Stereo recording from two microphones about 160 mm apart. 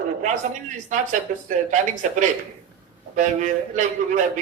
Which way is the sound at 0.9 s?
50° right (ahead or behind).